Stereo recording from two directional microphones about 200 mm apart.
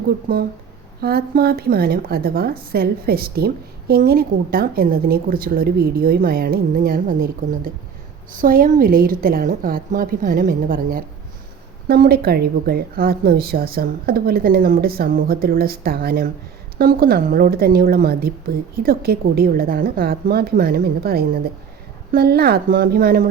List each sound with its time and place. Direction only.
1.0 s a woman's voice: 50° right (ahead or behind)